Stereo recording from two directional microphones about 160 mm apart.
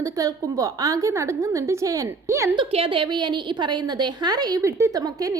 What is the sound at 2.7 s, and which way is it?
A woman's voice, 35° right (ahead or behind).